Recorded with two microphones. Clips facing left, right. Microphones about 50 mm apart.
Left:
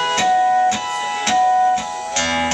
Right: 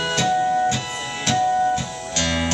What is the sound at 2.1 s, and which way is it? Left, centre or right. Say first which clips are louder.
Music: left 3 dB; left.